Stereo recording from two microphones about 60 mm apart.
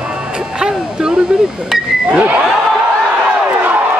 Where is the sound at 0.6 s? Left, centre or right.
Centre.